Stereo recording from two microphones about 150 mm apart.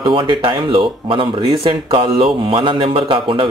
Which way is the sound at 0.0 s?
35° right (ahead or behind).